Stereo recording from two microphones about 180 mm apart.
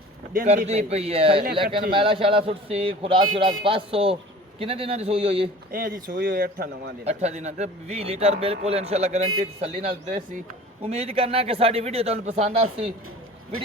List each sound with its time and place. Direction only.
0.4 s speech: 35° right (ahead or behind)
5.7 s speech: 50° right (ahead or behind)
7.0 s speech: 40° right (ahead or behind)